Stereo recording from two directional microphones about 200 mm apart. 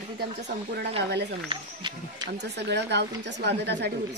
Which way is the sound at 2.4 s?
60° right (ahead or behind).